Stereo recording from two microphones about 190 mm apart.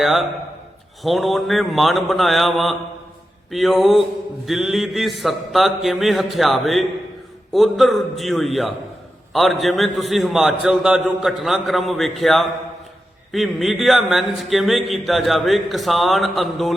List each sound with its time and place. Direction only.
0.0 s a man's voice: centre (ahead or behind)